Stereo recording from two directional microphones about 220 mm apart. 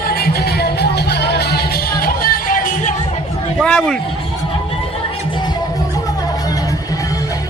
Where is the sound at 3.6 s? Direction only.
5° left (ahead or behind).